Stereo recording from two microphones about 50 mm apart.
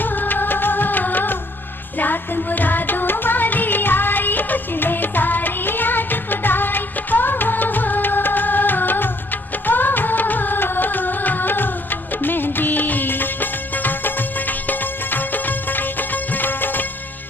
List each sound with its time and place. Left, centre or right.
0.0 s music: left